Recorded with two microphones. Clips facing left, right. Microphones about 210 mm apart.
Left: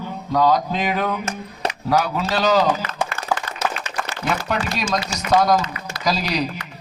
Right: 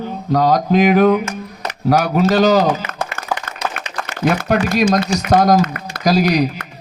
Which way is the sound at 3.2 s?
55° right (ahead or behind).